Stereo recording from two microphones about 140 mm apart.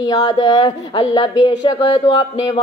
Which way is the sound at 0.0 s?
25° left (ahead or behind).